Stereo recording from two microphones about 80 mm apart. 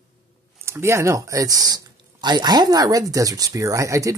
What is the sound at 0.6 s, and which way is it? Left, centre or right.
Speech, right.